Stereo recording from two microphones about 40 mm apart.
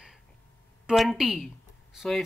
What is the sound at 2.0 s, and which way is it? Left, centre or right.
Speech, centre.